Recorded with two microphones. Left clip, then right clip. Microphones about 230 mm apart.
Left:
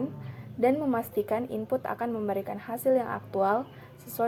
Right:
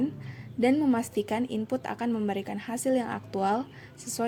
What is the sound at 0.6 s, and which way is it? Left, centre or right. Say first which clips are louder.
A woman's voice: even; right.